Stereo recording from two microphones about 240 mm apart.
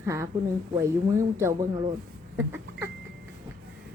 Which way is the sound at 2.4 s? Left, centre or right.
Centre.